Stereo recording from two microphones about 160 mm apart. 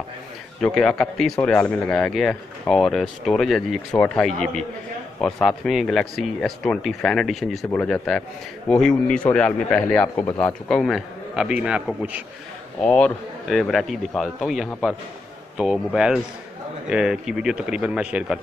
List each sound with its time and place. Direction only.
0.6 s speech: 5° left (ahead or behind)
10.7 s a man's voice: centre (ahead or behind)
12.8 s speech: 5° left (ahead or behind)